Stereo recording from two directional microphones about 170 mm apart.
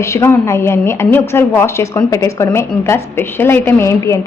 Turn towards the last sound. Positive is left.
turn(degrees=15)  # may be behind; listen again after turning